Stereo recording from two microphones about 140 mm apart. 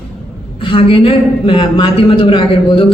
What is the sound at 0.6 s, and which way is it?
Speech, 40° left (ahead or behind).